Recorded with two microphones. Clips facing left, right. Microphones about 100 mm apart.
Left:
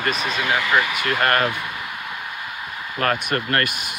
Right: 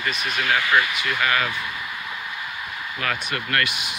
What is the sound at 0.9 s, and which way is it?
Speech, 50° left (ahead or behind).